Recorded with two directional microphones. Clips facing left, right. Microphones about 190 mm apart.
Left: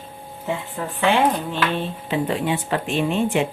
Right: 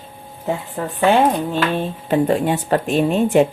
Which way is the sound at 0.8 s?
45° right (ahead or behind).